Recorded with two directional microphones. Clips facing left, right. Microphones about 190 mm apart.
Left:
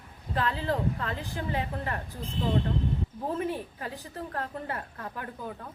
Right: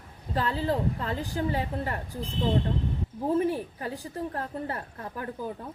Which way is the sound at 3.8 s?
30° right (ahead or behind).